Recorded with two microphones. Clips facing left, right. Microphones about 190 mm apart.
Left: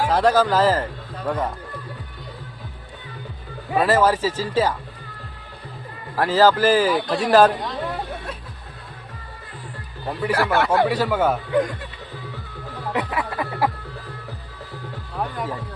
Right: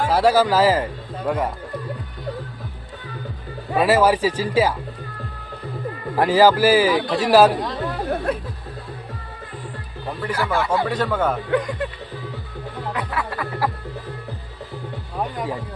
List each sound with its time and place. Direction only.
0.1 s a man's voice: 10° right (ahead or behind)
3.8 s a man's voice: 10° right (ahead or behind)
6.1 s a man's voice: 15° right (ahead or behind)
8.1 s a sound: 60° right (ahead or behind)
10.1 s a man's voice: 5° left (ahead or behind)
10.3 s a man's voice: 70° left (ahead or behind)
10.8 s a man's voice: 10° left (ahead or behind)
12.9 s music: 20° left (ahead or behind)
15.2 s music: 15° right (ahead or behind)